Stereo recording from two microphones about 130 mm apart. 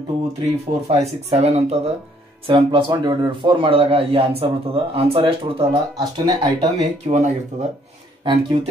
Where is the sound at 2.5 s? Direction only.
40° right (ahead or behind).